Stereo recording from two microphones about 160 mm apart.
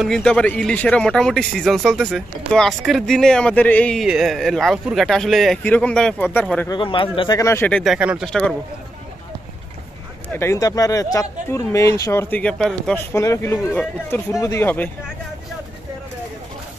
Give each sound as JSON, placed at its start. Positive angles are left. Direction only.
{"t": 0.0, "sound": "speech", "side_deg": 5}
{"t": 6.7, "sound": "speech", "side_deg": 30}
{"t": 7.3, "sound": "speech", "side_deg": 15}
{"t": 7.8, "sound": "speech", "side_deg": -5}
{"t": 8.3, "sound": "speech", "side_deg": 5}
{"t": 10.3, "sound": "speech", "side_deg": 15}
{"t": 13.1, "sound": "speech", "side_deg": 20}